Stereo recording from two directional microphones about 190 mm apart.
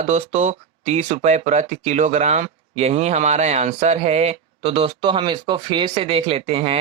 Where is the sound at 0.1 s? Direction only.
35° right (ahead or behind).